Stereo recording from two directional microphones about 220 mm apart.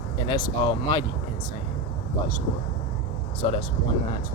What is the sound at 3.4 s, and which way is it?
Speech, 25° left (ahead or behind).